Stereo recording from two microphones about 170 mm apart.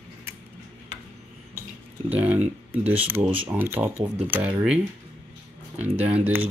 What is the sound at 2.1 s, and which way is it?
Speech, 10° right (ahead or behind).